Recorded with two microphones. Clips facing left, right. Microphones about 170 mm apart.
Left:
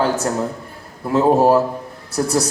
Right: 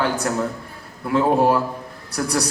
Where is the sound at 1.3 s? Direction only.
40° left (ahead or behind).